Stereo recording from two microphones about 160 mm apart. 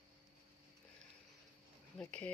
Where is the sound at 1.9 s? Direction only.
10° left (ahead or behind).